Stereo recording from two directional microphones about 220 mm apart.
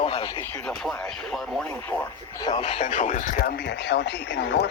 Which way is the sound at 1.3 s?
Centre (ahead or behind).